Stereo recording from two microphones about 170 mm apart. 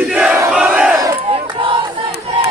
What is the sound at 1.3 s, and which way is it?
Crowd, 30° right (ahead or behind).